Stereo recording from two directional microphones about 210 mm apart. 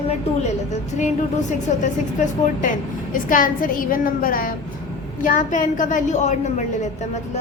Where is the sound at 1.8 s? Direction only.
35° left (ahead or behind).